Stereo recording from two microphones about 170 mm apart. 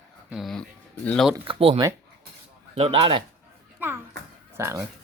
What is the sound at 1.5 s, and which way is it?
A man's voice, 35° right (ahead or behind).